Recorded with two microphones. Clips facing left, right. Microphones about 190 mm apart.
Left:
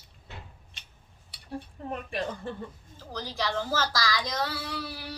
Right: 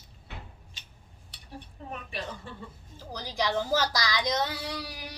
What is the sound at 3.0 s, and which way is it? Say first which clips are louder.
A child's voice: right 1 dB; 15° right (ahead or behind).